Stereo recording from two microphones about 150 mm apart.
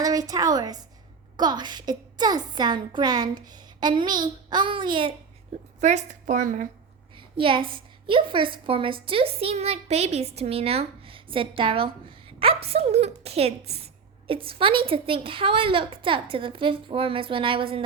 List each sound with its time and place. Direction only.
0.0 s a woman's voice: 25° right (ahead or behind)
5.8 s a woman's voice: 50° right (ahead or behind)
7.3 s a woman's voice: 35° right (ahead or behind)